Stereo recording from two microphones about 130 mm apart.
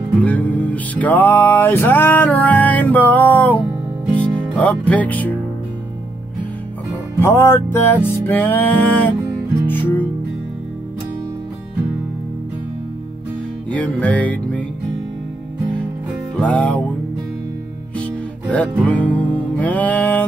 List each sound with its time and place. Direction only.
0.2 s music: 10° left (ahead or behind)
7.2 s music: 20° left (ahead or behind)
13.7 s music: 10° left (ahead or behind)
16.3 s music: 10° left (ahead or behind)
17.9 s music: 10° left (ahead or behind)